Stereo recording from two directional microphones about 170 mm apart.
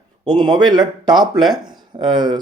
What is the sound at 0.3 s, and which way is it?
Speech, 25° right (ahead or behind).